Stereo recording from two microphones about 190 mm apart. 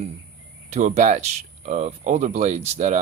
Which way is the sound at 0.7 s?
40° right (ahead or behind).